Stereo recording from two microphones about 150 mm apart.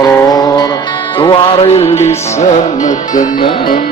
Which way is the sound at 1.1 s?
35° left (ahead or behind).